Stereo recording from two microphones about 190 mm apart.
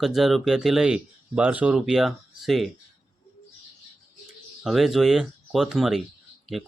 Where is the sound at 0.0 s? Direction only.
Centre (ahead or behind).